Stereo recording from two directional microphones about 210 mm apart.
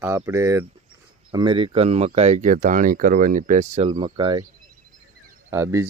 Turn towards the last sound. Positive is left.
turn(degrees=-15)  # may be behind; listen again after turning